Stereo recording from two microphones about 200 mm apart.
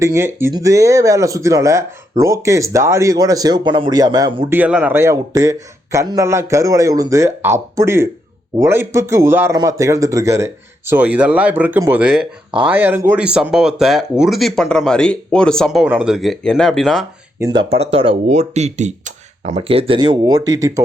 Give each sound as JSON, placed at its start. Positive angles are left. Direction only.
{"t": 0.0, "sound": "speech", "side_deg": -15}
{"t": 4.4, "sound": "speech", "side_deg": -10}
{"t": 17.4, "sound": "speech", "side_deg": -20}